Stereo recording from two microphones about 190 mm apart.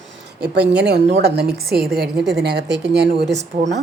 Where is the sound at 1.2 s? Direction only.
60° right (ahead or behind).